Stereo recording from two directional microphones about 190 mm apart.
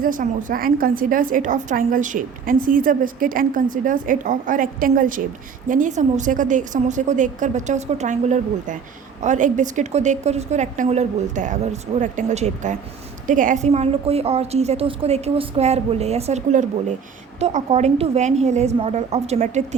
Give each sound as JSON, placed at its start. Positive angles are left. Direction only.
{"t": 0.0, "sound": "a woman's voice", "side_deg": -45}